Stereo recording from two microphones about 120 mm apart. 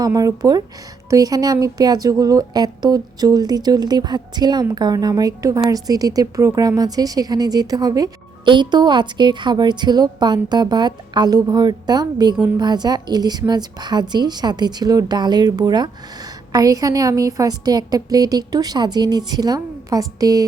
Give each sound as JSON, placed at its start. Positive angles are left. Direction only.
{"t": 0.0, "sound": "a woman's voice", "side_deg": -30}